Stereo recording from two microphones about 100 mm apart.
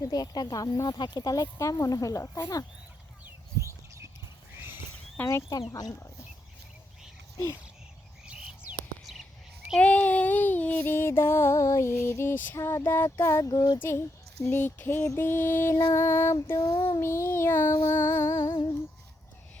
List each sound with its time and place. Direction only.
0.0 s speech: 40° left (ahead or behind)
3.2 s a sound: 30° right (ahead or behind)
5.1 s speech: 25° left (ahead or behind)
7.3 s a sound: 35° left (ahead or behind)
8.3 s bird: 10° right (ahead or behind)
9.7 s music: 10° left (ahead or behind); by 13.5 s 30° left (ahead or behind)
13.5 s speech: 40° left (ahead or behind)
13.7 s music: 25° left (ahead or behind)
16.6 s speech: 40° left (ahead or behind)
17.0 s music: 25° left (ahead or behind)